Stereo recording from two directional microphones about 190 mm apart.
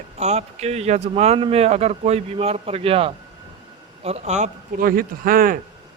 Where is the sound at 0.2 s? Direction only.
35° right (ahead or behind).